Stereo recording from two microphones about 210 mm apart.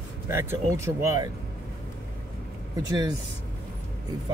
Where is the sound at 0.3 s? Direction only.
10° right (ahead or behind).